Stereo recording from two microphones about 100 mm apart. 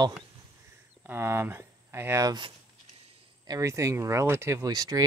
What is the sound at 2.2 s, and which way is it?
Speech, 50° right (ahead or behind).